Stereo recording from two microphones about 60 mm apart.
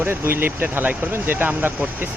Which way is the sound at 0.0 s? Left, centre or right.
Right.